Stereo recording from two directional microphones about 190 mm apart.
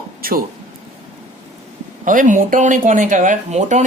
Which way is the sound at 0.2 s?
50° right (ahead or behind).